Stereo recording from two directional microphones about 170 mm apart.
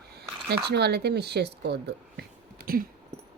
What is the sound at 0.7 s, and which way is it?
Speech, 75° right (ahead or behind).